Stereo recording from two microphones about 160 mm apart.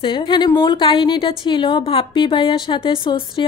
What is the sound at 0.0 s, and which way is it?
A woman's voice, 30° left (ahead or behind).